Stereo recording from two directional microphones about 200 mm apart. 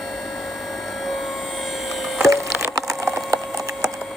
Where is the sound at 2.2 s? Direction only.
15° right (ahead or behind).